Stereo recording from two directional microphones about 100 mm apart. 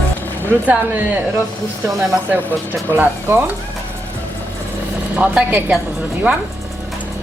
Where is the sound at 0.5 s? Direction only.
20° right (ahead or behind).